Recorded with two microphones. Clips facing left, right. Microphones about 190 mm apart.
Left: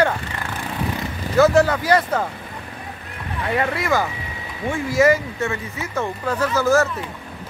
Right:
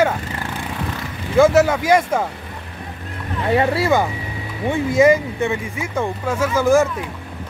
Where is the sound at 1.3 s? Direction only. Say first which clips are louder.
Right 2 dB; 10° right (ahead or behind).